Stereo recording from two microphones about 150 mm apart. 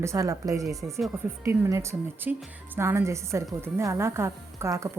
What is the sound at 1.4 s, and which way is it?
A woman's voice, 15° right (ahead or behind).